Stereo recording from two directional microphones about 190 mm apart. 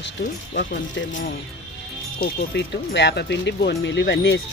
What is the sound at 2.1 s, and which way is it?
Speech, 60° left (ahead or behind).